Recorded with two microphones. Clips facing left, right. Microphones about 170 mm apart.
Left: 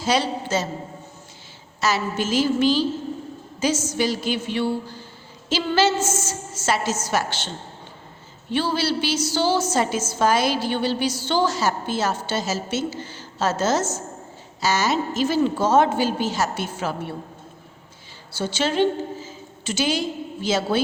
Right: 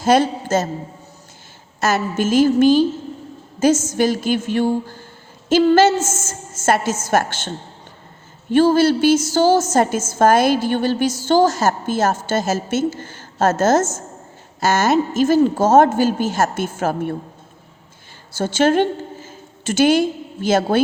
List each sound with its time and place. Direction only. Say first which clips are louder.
0.0 s a man's voice: right 7 dB; 50° right (ahead or behind)
1.8 s a woman's voice: right 4 dB; 50° right (ahead or behind)
18.3 s a woman's voice: right 8 dB; 50° right (ahead or behind)